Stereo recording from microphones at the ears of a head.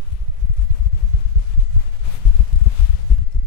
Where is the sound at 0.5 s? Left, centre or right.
Left.